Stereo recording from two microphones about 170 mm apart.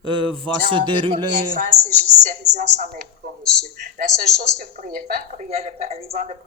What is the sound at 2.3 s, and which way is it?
Speech, 40° right (ahead or behind).